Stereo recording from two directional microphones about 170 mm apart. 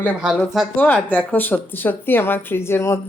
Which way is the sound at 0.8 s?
10° left (ahead or behind).